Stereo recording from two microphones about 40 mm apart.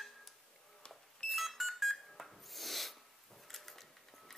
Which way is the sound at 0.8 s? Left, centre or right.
Left.